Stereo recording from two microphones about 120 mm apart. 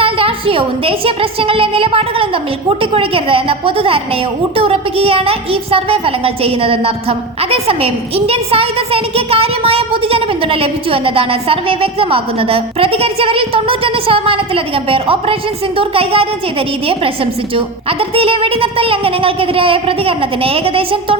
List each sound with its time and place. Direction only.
0.0 s a woman's voice: 50° right (ahead or behind)